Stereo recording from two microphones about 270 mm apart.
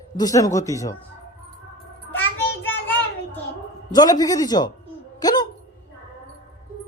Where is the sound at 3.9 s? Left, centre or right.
Centre.